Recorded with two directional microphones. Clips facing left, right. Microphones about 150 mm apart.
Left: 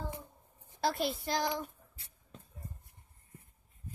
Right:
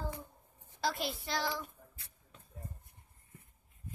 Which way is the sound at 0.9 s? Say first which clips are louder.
Left 4 dB; 45° left (ahead or behind).